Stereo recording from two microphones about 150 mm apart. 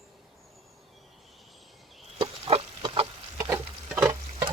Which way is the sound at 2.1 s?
40° right (ahead or behind).